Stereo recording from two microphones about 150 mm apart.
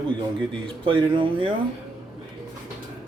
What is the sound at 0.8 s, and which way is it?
Speech, 35° right (ahead or behind).